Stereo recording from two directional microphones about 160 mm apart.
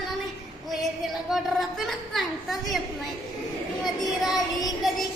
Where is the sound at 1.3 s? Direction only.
Centre (ahead or behind).